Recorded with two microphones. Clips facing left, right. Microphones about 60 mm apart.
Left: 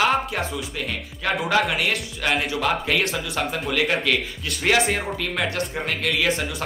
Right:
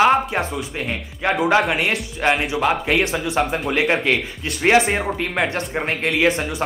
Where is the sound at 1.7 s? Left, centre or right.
Right.